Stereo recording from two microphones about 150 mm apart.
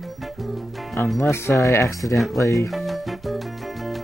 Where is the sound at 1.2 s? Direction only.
15° left (ahead or behind).